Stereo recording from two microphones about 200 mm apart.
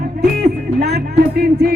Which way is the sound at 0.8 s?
55° right (ahead or behind).